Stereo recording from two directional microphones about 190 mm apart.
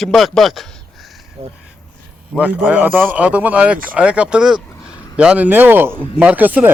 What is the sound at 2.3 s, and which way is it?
A man's voice, 5° right (ahead or behind).